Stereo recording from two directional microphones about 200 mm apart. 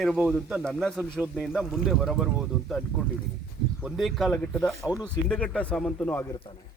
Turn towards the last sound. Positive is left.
turn(degrees=10)  # may be behind; listen again after turning